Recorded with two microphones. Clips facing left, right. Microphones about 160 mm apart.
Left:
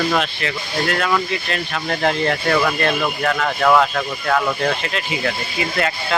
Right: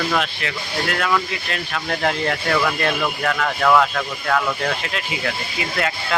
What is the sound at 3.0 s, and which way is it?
Speech, 10° left (ahead or behind).